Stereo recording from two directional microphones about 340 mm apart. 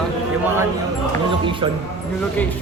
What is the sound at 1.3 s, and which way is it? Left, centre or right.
Music, centre.